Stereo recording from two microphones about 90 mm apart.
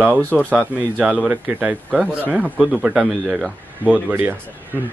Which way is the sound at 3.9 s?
20° right (ahead or behind).